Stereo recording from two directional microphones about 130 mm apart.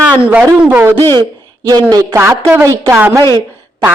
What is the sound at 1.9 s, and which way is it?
A woman's voice, 20° right (ahead or behind).